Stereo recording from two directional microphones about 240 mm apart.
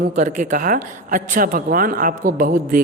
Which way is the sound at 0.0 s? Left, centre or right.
Right.